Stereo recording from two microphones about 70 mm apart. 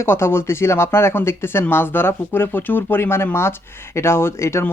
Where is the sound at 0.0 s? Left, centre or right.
Left.